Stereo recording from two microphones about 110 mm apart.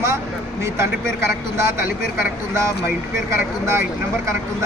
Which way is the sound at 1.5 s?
25° right (ahead or behind).